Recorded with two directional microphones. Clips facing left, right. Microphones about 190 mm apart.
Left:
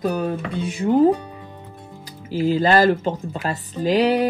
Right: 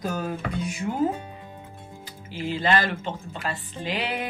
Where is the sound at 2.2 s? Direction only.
35° left (ahead or behind).